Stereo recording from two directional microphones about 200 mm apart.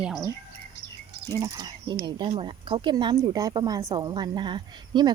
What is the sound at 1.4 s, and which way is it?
Speech, 20° right (ahead or behind).